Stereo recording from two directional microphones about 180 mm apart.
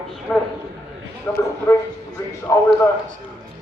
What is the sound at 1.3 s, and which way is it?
Speech, 15° left (ahead or behind).